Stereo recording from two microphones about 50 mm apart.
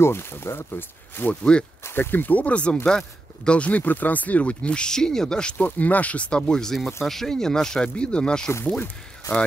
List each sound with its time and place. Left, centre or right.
0.0 s speech: left
1.4 s speech: centre
2.0 s speech: left; by 5.6 s centre
5.6 s speech: left
6.5 s speech: centre